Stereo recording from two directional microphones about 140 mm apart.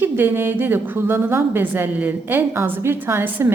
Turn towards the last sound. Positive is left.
turn(degrees=-15)  # may be behind; listen again after turning